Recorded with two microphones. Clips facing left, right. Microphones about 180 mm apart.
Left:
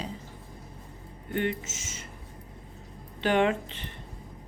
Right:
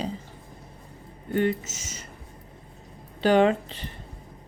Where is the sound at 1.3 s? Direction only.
40° right (ahead or behind).